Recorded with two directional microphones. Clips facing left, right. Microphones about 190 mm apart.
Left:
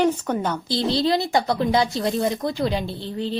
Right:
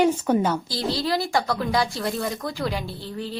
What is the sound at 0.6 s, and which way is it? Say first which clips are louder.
A woman's voice: left 5 dB; 25° left (ahead or behind).